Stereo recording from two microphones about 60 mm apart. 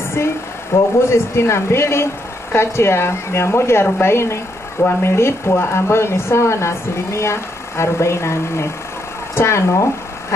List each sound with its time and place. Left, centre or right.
0.2 s speech: left